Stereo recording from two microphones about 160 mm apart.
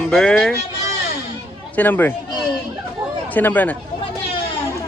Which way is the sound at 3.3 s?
10° left (ahead or behind).